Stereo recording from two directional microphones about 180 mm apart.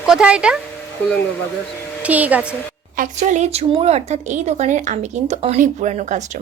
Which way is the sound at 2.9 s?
45° right (ahead or behind).